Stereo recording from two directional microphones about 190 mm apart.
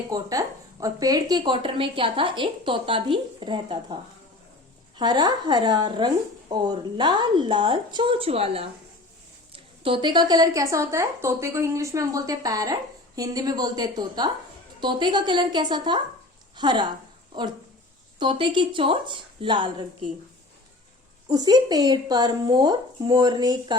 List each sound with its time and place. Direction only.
0.1 s a woman's voice: 20° right (ahead or behind)
4.9 s a woman's voice: 20° right (ahead or behind)
18.2 s a woman's voice: 25° right (ahead or behind)
21.2 s a woman's voice: 20° right (ahead or behind)